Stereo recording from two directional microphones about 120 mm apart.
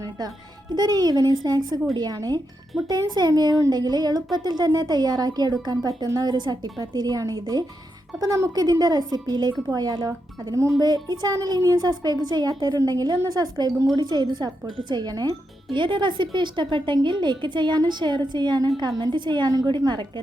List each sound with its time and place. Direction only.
0.8 s speech: 35° right (ahead or behind)
10.8 s speech: 35° right (ahead or behind)